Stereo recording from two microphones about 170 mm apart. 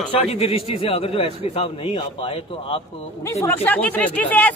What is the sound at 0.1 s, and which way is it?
A man's voice, 35° left (ahead or behind).